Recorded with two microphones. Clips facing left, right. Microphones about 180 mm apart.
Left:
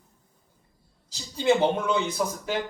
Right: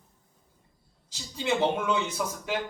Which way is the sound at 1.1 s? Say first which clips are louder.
Left 6 dB; 35° left (ahead or behind).